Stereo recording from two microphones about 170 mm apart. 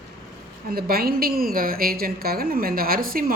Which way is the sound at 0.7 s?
60° right (ahead or behind).